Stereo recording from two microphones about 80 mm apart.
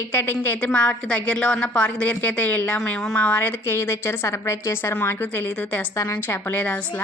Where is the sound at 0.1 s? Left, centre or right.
Left.